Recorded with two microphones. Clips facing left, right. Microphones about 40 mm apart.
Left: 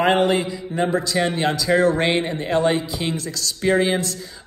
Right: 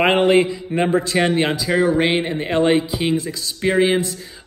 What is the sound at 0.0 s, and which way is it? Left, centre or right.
Speech, right.